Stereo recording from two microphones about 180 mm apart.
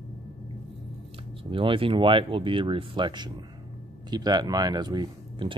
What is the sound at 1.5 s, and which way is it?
Speech, 30° right (ahead or behind).